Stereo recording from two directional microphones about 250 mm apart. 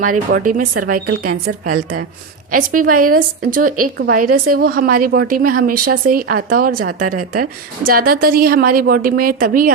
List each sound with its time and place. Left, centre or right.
0.0 s a woman's voice: right